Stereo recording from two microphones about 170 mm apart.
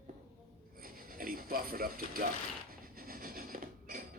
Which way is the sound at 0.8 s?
55° right (ahead or behind).